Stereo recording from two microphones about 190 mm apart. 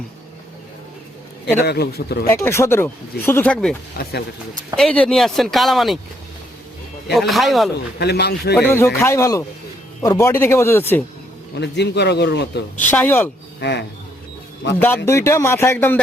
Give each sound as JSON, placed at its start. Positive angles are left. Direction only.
{"t": 1.6, "sound": "speech", "side_deg": 55}
{"t": 2.3, "sound": "speech", "side_deg": 15}
{"t": 4.0, "sound": "speech", "side_deg": 55}
{"t": 4.8, "sound": "speech", "side_deg": 5}
{"t": 7.1, "sound": "speech", "side_deg": 0}
{"t": 7.9, "sound": "speech", "side_deg": 60}
{"t": 8.5, "sound": "speech", "side_deg": 15}
{"t": 11.5, "sound": "speech", "side_deg": 65}
{"t": 12.8, "sound": "speech", "side_deg": 10}
{"t": 13.6, "sound": "speech", "side_deg": 65}
{"t": 15.0, "sound": "speech", "side_deg": 15}